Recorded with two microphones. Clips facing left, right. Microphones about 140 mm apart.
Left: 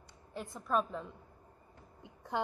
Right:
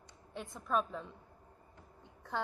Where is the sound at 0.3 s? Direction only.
Centre (ahead or behind).